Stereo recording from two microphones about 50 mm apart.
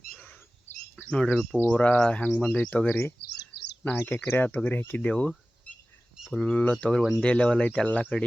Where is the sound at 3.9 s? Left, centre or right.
Left.